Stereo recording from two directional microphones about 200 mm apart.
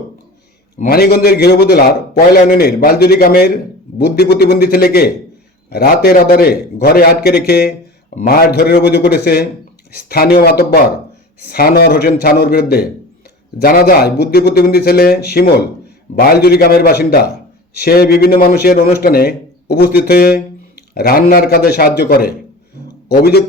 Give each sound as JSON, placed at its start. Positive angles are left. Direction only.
{"t": 0.8, "sound": "a man's voice", "side_deg": 50}